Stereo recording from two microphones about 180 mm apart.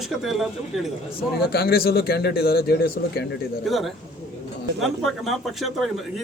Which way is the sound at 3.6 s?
Centre (ahead or behind).